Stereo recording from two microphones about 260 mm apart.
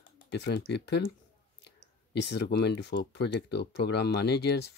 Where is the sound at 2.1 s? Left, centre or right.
Left.